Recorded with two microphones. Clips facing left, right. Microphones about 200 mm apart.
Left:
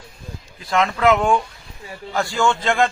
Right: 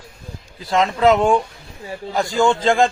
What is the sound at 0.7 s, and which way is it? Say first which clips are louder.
Speech: right 2 dB; 30° right (ahead or behind).